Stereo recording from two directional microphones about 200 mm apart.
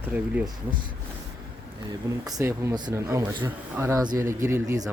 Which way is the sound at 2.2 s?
15° right (ahead or behind).